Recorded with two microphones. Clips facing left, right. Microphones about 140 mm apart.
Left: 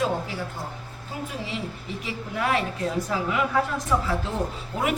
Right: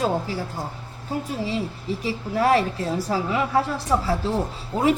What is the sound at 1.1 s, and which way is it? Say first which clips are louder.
A woman's voice: right 6 dB; 40° right (ahead or behind).